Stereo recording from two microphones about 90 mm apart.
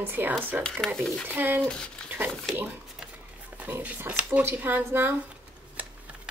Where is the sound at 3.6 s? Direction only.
20° right (ahead or behind).